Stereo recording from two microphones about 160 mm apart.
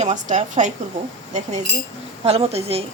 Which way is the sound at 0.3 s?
50° right (ahead or behind).